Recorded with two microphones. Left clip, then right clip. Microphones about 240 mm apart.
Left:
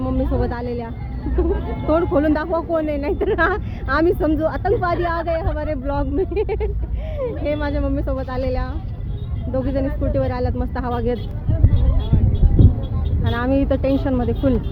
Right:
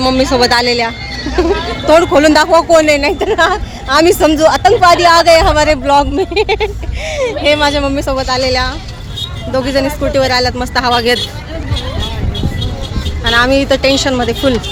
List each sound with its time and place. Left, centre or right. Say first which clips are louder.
0.0 s speech: right 13 dB; centre
2.5 s speech: right 14 dB; right
2.7 s speech: right 12 dB; centre
4.0 s speech: right 11 dB; centre
13.2 s speech: right 11 dB; centre